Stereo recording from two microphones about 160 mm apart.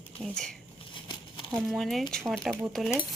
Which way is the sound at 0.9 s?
30° left (ahead or behind).